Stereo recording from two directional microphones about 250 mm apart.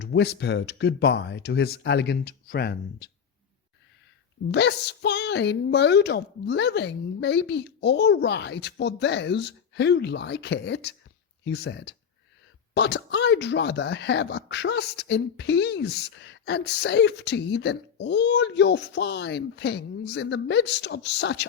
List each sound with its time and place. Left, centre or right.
0.0 s speech: left
4.5 s speech: left